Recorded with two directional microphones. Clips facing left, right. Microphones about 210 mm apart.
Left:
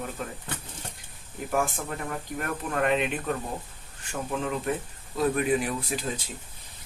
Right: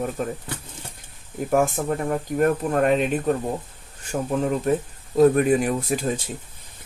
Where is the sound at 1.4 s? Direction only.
45° right (ahead or behind).